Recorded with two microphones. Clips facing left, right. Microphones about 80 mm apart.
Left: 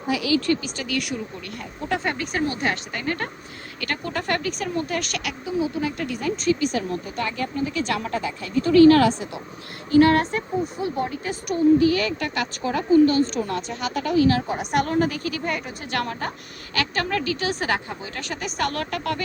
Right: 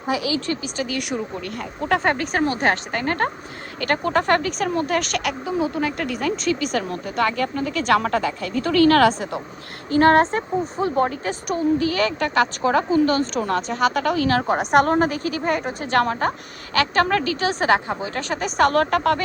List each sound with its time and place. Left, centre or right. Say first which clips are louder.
0.1 s speech: left 1 dB; right
1.5 s a woman's voice: right 5 dB; right
2.3 s a woman's voice: right 4 dB; right
9.9 s a woman's voice: right 2 dB; right
14.6 s speech: right 7 dB; right
17.4 s speech: right 6 dB; right